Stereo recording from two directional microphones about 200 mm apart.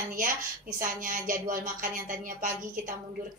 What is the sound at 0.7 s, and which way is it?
A woman's voice, 40° right (ahead or behind).